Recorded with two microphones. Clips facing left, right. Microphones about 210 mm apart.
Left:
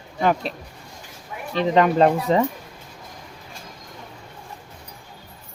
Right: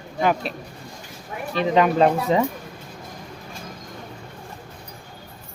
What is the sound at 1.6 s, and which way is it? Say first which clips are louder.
Speech: left 1 dB; 10° right (ahead or behind).